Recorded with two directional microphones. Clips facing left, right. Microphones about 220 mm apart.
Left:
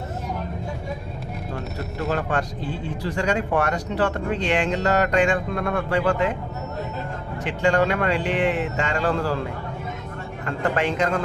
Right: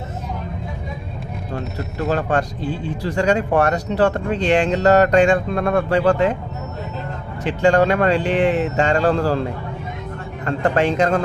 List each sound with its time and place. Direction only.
3.2 s speech: 40° right (ahead or behind)
7.4 s speech: 40° right (ahead or behind)
10.4 s speech: 35° right (ahead or behind)